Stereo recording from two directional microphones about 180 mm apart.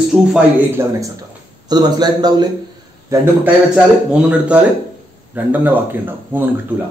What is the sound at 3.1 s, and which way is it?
A man's voice, 5° right (ahead or behind).